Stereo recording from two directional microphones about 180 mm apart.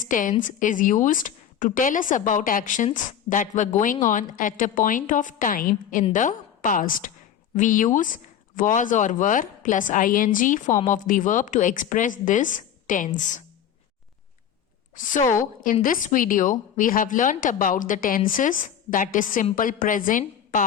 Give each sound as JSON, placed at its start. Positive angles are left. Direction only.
{"t": 0.0, "sound": "a woman's voice", "side_deg": 45}
{"t": 14.9, "sound": "a woman's voice", "side_deg": 45}